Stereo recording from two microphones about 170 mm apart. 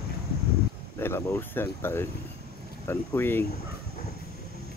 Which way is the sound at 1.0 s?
15° left (ahead or behind).